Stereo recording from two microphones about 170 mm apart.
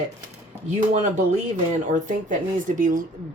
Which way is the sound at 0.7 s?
40° right (ahead or behind).